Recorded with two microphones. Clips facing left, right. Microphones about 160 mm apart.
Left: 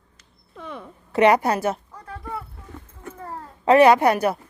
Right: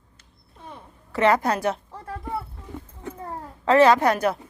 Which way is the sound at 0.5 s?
80° left.